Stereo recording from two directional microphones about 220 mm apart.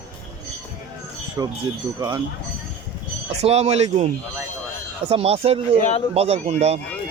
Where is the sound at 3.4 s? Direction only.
30° right (ahead or behind).